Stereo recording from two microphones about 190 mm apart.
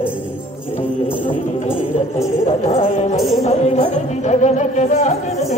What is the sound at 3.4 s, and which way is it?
Music, 35° left (ahead or behind).